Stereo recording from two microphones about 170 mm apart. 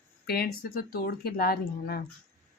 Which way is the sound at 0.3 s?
70° left (ahead or behind).